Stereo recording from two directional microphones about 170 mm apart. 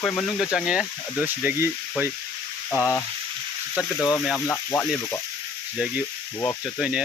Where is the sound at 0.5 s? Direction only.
5° right (ahead or behind).